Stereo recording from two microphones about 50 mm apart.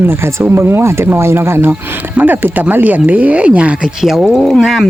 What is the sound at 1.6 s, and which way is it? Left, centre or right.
Speech, right.